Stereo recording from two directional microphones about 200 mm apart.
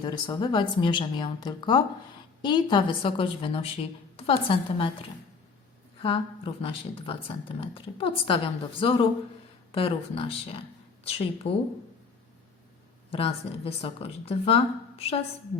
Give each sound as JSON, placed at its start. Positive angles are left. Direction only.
{"t": 0.0, "sound": "speech", "side_deg": 20}
{"t": 13.1, "sound": "speech", "side_deg": 30}